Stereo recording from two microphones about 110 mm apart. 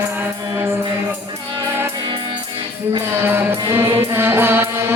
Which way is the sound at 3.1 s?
20° right (ahead or behind).